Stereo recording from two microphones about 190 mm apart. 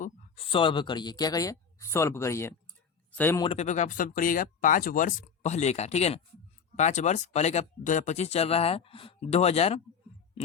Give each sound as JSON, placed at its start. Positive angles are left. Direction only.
{"t": 0.0, "sound": "a man's voice", "side_deg": 30}
{"t": 3.4, "sound": "speech", "side_deg": 35}